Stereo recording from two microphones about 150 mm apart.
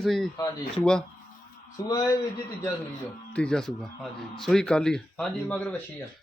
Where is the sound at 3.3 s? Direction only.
5° left (ahead or behind).